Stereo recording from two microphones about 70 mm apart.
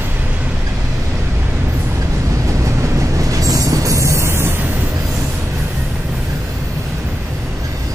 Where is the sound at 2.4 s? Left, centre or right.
Right.